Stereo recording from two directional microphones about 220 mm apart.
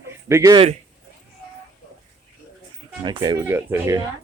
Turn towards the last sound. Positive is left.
turn(degrees=-15)  # may be behind; listen again after turning